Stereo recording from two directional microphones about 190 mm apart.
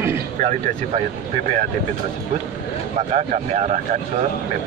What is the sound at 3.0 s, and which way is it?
Speech, 35° right (ahead or behind).